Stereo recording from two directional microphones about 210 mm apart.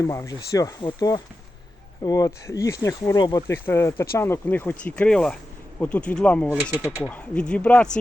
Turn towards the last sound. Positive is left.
turn(degrees=5)  # may be behind; listen again after turning